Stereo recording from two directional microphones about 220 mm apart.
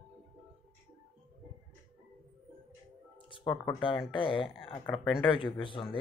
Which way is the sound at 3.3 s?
20° left (ahead or behind).